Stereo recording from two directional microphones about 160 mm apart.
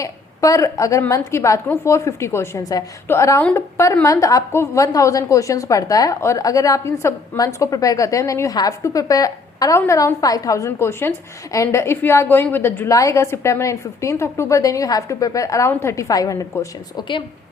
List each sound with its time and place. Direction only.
0.0 s a woman's voice: 20° left (ahead or behind)